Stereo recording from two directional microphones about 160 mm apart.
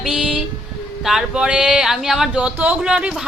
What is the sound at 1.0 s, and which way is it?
Speech, 5° right (ahead or behind).